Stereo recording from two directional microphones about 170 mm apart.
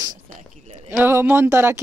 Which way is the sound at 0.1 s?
50° right (ahead or behind).